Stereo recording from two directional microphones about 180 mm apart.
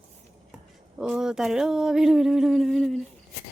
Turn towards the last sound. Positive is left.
turn(degrees=0)  # may be behind; listen again after turning